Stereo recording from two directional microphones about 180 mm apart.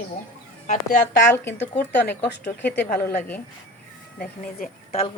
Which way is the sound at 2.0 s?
65° left (ahead or behind).